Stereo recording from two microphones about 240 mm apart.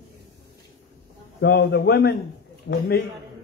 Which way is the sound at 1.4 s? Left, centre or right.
Left.